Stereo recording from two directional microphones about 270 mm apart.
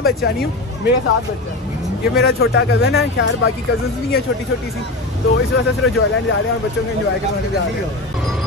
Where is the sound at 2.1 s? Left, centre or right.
Left.